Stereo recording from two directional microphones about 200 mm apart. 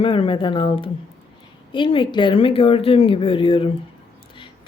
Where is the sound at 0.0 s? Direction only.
25° left (ahead or behind).